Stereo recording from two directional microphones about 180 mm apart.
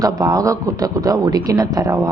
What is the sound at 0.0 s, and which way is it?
Speech, 20° right (ahead or behind).